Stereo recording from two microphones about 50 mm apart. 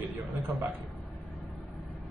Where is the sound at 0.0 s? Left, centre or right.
Right.